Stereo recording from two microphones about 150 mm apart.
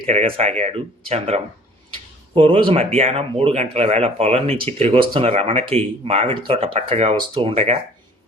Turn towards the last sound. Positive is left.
turn(degrees=-40)  # may be behind; listen again after turning